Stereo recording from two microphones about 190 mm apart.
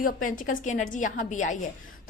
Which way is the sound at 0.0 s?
45° left (ahead or behind).